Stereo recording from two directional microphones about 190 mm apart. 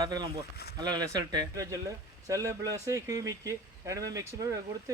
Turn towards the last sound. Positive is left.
turn(degrees=-15)  # may be behind; listen again after turning